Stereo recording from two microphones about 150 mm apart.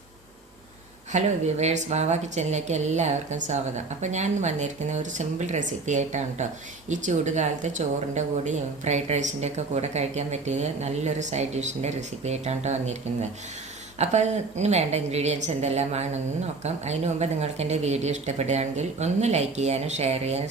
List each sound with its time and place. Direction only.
1.1 s speech: 50° right (ahead or behind)
14.0 s speech: 50° right (ahead or behind)